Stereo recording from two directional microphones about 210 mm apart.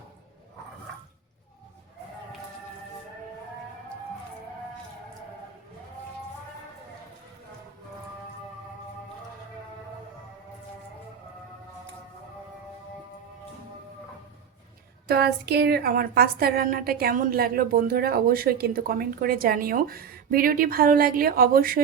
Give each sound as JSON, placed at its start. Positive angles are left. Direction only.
{"t": 15.0, "sound": "a woman's voice", "side_deg": -50}